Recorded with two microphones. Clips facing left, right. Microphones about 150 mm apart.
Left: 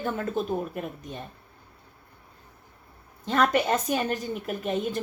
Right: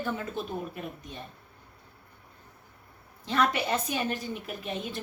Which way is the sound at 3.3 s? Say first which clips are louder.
Left 4 dB; 45° left (ahead or behind).